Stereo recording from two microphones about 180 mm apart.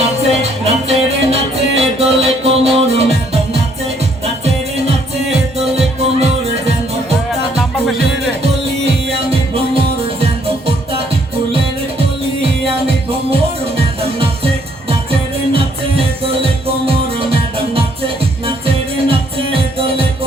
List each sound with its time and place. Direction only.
0.0 s music: 35° right (ahead or behind)
11.5 s music: 30° right (ahead or behind)
15.5 s music: 30° right (ahead or behind)
18.4 s music: 30° right (ahead or behind)